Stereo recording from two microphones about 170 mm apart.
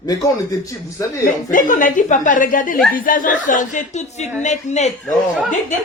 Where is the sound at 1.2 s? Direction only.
50° left (ahead or behind).